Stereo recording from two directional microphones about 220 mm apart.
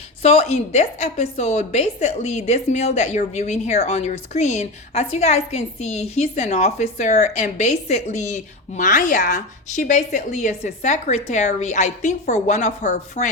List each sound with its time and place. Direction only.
0.2 s a woman's voice: 30° left (ahead or behind)